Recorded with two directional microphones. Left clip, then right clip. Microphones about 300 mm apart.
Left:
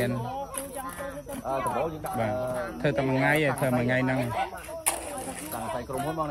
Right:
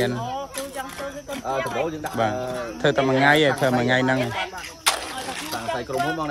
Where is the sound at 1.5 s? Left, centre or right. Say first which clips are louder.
Right 3 dB; right.